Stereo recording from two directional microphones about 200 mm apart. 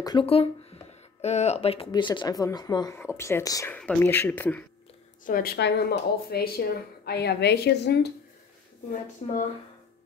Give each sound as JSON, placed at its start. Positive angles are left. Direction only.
{"t": 0.0, "sound": "speech", "side_deg": 25}
{"t": 5.2, "sound": "a woman's voice", "side_deg": 45}
{"t": 9.2, "sound": "speech", "side_deg": 30}